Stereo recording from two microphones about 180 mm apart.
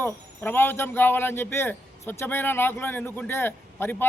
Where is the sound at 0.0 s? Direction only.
10° left (ahead or behind).